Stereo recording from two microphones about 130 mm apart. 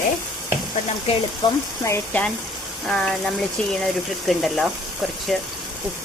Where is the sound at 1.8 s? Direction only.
15° left (ahead or behind).